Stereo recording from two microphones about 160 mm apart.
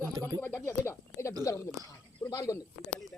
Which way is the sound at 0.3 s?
15° left (ahead or behind).